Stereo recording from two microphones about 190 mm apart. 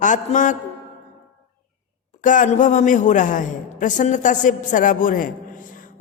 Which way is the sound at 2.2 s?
40° left (ahead or behind).